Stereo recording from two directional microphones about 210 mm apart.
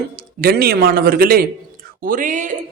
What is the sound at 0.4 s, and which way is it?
A man's voice, 45° right (ahead or behind).